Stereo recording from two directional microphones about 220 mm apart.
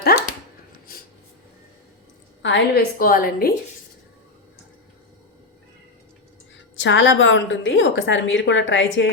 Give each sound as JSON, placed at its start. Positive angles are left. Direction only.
{"t": 0.1, "sound": "chopping", "side_deg": 45}
{"t": 2.4, "sound": "a woman's voice", "side_deg": 55}
{"t": 3.0, "sound": "a woman's voice", "side_deg": 40}
{"t": 6.7, "sound": "a woman's voice", "side_deg": 55}